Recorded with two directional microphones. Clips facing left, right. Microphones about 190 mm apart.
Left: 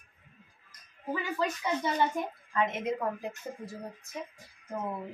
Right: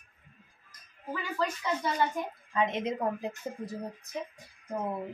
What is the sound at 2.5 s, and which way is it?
A woman's voice, 20° right (ahead or behind).